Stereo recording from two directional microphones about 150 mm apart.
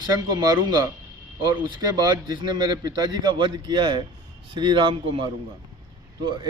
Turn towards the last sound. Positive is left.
turn(degrees=-30)  # may be behind; listen again after turning